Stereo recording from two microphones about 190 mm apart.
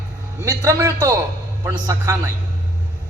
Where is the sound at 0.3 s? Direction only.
15° right (ahead or behind).